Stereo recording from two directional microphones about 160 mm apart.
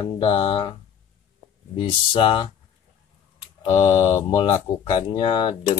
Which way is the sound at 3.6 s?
25° left (ahead or behind).